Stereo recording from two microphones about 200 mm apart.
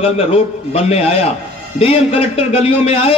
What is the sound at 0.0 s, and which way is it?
A man's voice, 30° left (ahead or behind).